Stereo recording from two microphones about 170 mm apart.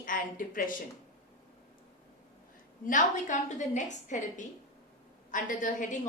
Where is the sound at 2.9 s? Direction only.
45° left (ahead or behind).